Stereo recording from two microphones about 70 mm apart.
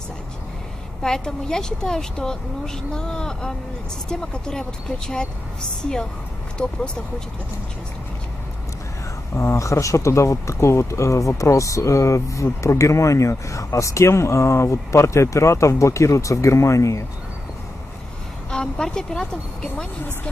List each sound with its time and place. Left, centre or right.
1.0 s speech: centre
9.3 s speech: left
18.5 s a woman's voice: centre